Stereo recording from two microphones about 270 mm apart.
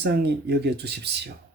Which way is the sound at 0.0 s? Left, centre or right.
Right.